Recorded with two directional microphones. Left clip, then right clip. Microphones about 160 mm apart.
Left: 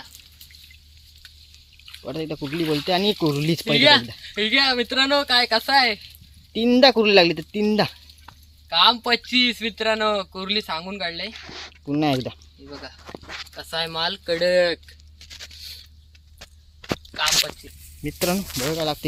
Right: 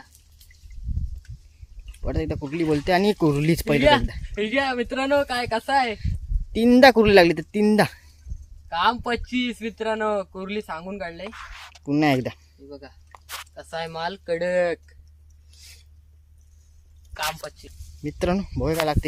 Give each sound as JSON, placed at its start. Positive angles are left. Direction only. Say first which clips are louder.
{"t": 2.0, "sound": "speech", "louder": "right 1 dB", "side_deg": -25}
{"t": 3.7, "sound": "speech", "louder": "left 3 dB", "side_deg": -20}
{"t": 6.5, "sound": "speech", "louder": "right 2 dB", "side_deg": -35}
{"t": 8.7, "sound": "speech", "louder": "left 5 dB", "side_deg": -10}
{"t": 11.9, "sound": "speech", "louder": "right 1 dB", "side_deg": -25}
{"t": 13.6, "sound": "speech", "louder": "left 4 dB", "side_deg": -10}
{"t": 17.2, "sound": "speech", "louder": "left 7 dB", "side_deg": -5}